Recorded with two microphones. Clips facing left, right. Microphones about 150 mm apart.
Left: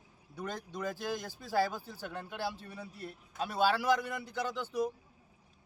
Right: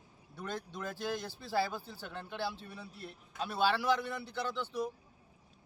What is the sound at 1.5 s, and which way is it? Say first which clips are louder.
Speech: left 2 dB; 40° left (ahead or behind).